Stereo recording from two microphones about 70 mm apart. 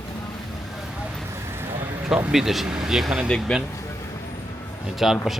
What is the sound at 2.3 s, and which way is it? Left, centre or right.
Speech, centre.